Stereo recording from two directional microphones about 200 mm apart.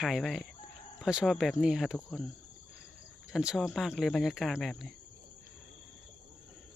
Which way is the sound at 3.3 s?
5° right (ahead or behind).